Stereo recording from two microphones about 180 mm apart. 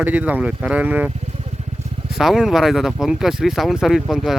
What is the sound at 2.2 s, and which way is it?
Speech, centre (ahead or behind).